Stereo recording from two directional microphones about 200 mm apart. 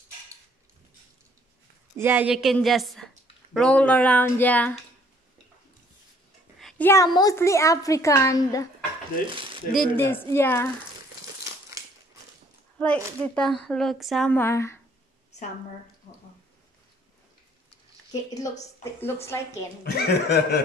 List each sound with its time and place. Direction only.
2.0 s a woman's voice: 10° right (ahead or behind); by 4.7 s 10° left (ahead or behind)
6.6 s a woman's voice: 10° left (ahead or behind)
9.9 s a woman's voice: 10° left (ahead or behind)
12.7 s speech: 5° left (ahead or behind)
18.1 s a woman's voice: 20° left (ahead or behind)
19.8 s chuckle: 55° left (ahead or behind)